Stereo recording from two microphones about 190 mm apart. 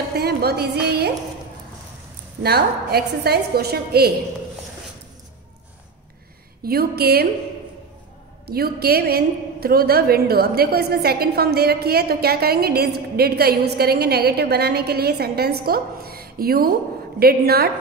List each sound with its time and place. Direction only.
0.1 s a woman's voice: 55° right (ahead or behind)
2.4 s a woman's voice: 55° right (ahead or behind)
6.6 s a woman's voice: 55° right (ahead or behind)
8.5 s a woman's voice: 55° right (ahead or behind)